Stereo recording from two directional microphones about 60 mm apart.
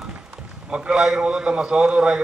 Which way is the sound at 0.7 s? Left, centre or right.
Centre.